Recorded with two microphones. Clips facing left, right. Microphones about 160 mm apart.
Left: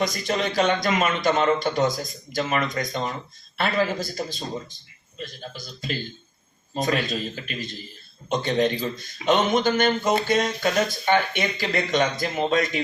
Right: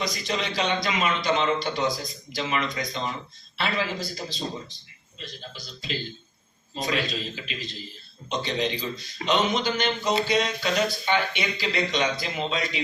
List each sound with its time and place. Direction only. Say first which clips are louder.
0.0 s speech: left 4 dB; 50° left (ahead or behind)